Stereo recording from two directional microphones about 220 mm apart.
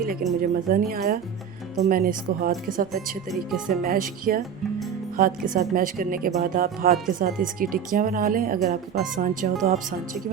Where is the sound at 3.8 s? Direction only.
40° right (ahead or behind).